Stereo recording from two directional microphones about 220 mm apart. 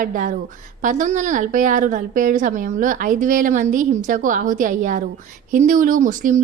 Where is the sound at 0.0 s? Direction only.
35° right (ahead or behind).